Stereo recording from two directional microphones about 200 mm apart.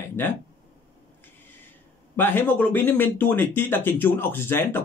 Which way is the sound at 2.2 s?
10° left (ahead or behind).